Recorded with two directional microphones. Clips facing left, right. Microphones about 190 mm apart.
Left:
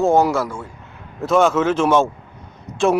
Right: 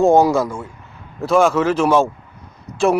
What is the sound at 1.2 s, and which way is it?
Speech, centre (ahead or behind).